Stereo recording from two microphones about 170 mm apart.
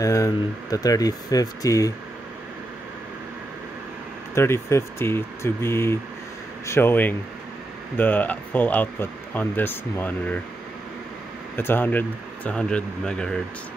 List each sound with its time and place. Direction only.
0.0 s speech: 20° left (ahead or behind)
4.4 s speech: 15° left (ahead or behind)
11.5 s speech: 10° left (ahead or behind)